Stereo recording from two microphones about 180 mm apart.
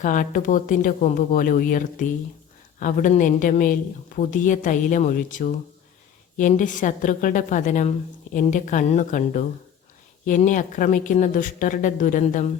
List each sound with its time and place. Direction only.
0.0 s a woman's voice: 50° left (ahead or behind)